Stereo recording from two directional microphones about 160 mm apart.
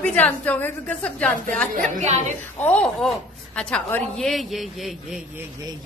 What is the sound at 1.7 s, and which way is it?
Speech, 50° right (ahead or behind).